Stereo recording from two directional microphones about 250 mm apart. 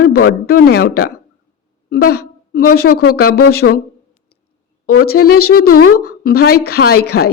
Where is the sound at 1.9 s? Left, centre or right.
Left.